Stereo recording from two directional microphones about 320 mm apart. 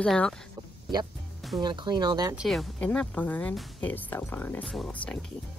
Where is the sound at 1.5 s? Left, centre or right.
Centre.